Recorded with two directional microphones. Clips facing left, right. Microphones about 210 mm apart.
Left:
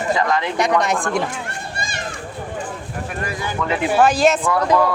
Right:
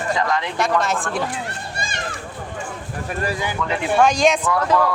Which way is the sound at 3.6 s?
5° left (ahead or behind).